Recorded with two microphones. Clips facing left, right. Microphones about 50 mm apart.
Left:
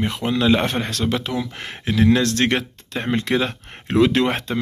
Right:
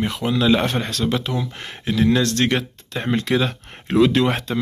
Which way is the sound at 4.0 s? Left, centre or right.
Left.